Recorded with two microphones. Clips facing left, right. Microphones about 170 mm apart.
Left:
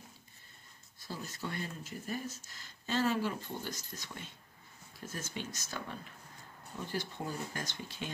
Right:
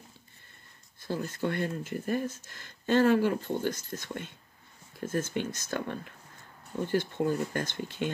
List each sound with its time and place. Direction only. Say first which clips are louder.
1.0 s speech: right 10 dB; 55° right (ahead or behind)